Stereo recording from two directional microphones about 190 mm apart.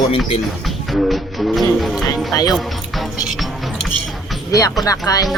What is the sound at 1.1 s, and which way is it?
Music, centre (ahead or behind).